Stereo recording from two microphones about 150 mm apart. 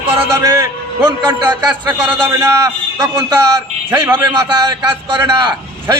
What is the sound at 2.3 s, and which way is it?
Speech, 20° right (ahead or behind).